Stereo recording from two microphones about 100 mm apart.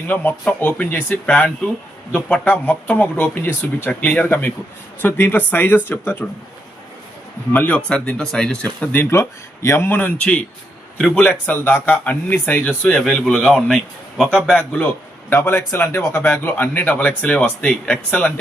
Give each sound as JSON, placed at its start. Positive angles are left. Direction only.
{"t": 0.1, "sound": "a man's voice", "side_deg": 15}
{"t": 7.5, "sound": "a man's voice", "side_deg": 15}
{"t": 8.6, "sound": "a man's voice", "side_deg": 20}
{"t": 15.3, "sound": "a man's voice", "side_deg": 25}